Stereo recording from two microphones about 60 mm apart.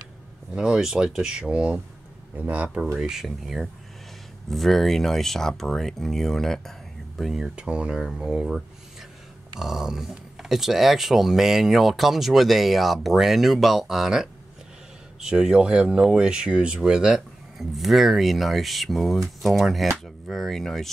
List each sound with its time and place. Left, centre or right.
0.6 s speech: centre
3.0 s speech: centre
7.5 s speech: centre
9.6 s speech: centre